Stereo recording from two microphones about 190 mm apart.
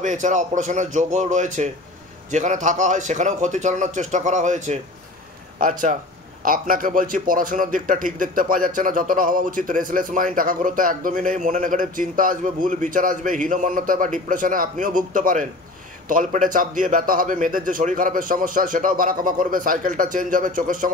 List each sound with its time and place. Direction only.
0.0 s a man's voice: 40° right (ahead or behind)